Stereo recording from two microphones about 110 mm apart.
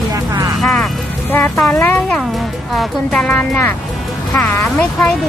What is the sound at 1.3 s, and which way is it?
Speech, 20° left (ahead or behind).